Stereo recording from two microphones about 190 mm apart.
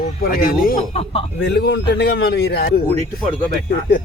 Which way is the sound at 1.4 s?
60° left (ahead or behind).